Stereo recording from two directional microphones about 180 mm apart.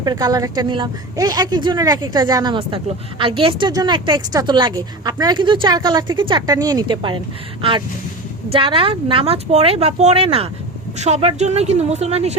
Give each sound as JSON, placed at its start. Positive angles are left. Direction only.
{"t": 0.0, "sound": "a woman's voice", "side_deg": -20}
{"t": 8.4, "sound": "speech", "side_deg": -30}